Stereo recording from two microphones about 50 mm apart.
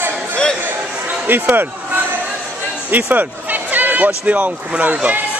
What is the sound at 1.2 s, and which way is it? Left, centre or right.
Speech, right.